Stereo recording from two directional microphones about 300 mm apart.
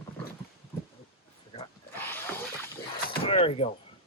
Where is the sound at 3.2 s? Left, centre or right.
Centre.